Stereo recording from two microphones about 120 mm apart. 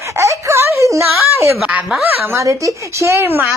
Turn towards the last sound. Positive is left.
turn(degrees=-20)  # may be behind; listen again after turning